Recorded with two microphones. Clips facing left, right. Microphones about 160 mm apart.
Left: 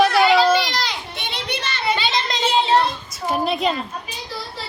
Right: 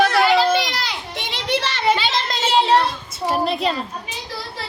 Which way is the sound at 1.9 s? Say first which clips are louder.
Even; 5° right (ahead or behind).